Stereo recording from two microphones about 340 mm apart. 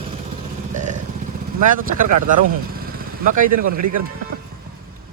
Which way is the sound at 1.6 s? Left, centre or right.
Right.